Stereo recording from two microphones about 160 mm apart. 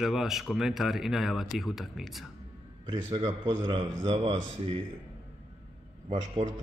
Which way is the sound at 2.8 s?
30° right (ahead or behind).